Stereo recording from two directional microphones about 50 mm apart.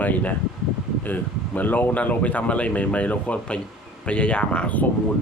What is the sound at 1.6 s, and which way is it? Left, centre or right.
Speech, left.